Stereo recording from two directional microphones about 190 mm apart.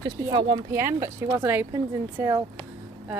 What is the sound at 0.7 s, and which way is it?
Speech, 15° right (ahead or behind).